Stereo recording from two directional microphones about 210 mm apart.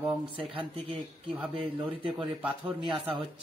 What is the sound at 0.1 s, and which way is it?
Speech, 25° right (ahead or behind).